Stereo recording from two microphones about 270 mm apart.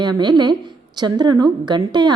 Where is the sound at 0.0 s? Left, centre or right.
Centre.